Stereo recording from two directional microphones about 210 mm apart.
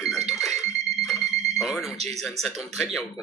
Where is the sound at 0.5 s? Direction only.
30° right (ahead or behind).